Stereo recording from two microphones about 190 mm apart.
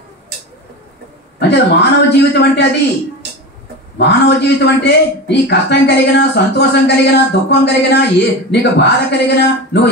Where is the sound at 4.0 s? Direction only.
65° left (ahead or behind).